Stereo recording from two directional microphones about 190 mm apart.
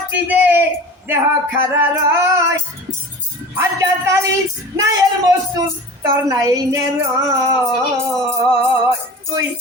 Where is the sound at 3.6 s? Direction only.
15° right (ahead or behind).